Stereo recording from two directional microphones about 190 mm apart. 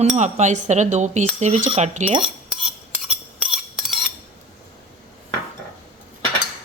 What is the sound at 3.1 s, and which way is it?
Cutlery, 5° right (ahead or behind).